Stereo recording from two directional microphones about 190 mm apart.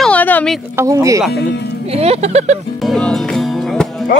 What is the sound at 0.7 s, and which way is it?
Speech, 15° right (ahead or behind).